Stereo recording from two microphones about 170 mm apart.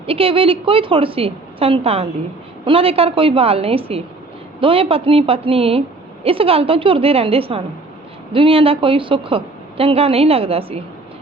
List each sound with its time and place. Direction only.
0.0 s a woman's voice: 35° right (ahead or behind)